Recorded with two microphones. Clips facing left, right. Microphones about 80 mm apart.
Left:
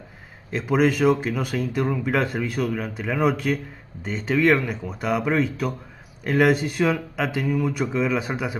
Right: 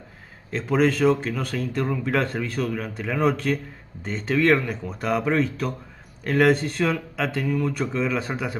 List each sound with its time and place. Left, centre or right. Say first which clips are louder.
0.5 s speech: left 1 dB; centre